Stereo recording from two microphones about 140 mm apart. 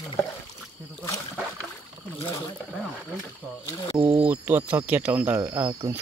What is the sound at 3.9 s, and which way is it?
Speech, 10° right (ahead or behind).